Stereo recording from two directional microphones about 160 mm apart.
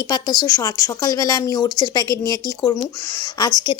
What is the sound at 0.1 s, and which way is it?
A woman's voice, 25° left (ahead or behind).